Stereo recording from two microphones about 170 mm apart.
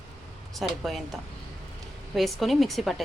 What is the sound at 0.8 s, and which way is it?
Speech, centre (ahead or behind).